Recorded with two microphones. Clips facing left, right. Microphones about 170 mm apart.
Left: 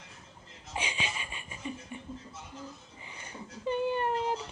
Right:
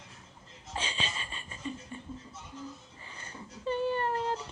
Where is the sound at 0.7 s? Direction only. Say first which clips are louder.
Left 1 dB; 15° left (ahead or behind).